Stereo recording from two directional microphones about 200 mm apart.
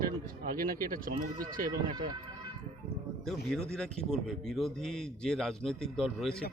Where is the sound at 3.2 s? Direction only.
5° left (ahead or behind).